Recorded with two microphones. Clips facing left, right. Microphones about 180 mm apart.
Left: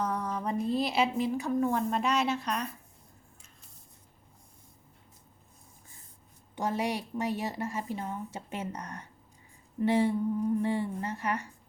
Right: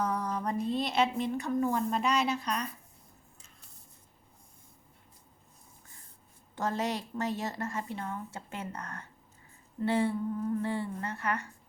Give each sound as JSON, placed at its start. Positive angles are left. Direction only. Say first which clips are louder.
{"t": 0.0, "sound": "a woman's voice", "louder": "even", "side_deg": 0}
{"t": 6.6, "sound": "a woman's voice", "louder": "left 1 dB", "side_deg": 10}